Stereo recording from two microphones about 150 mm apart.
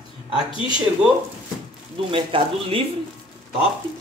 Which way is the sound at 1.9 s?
35° right (ahead or behind).